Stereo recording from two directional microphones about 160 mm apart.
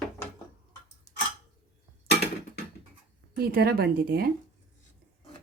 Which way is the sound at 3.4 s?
75° right (ahead or behind).